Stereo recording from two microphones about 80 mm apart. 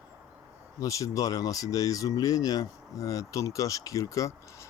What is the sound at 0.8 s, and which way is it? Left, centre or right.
Speech, left.